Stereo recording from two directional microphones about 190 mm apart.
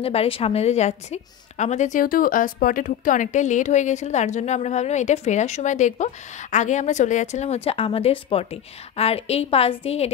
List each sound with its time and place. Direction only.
0.0 s a woman's voice: 30° left (ahead or behind)